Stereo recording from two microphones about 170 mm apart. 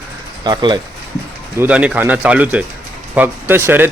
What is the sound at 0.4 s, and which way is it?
Speech, 25° right (ahead or behind).